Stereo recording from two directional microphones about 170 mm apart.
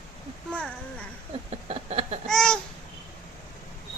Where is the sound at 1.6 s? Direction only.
35° right (ahead or behind).